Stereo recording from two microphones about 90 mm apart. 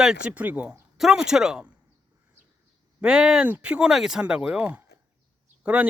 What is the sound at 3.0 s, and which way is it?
Speech, 10° right (ahead or behind).